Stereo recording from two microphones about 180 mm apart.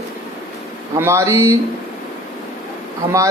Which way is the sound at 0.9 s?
15° right (ahead or behind).